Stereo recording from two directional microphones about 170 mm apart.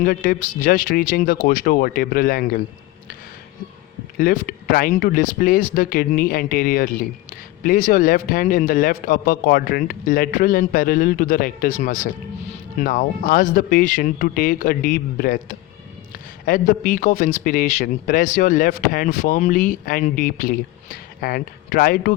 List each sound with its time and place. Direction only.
0.0 s speech: 55° left (ahead or behind)
4.2 s speech: 55° left (ahead or behind)